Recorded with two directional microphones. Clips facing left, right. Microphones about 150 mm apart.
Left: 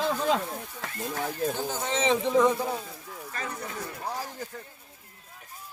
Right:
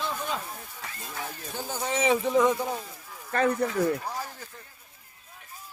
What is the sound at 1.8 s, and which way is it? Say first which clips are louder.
Speech: right 2 dB; 25° left (ahead or behind).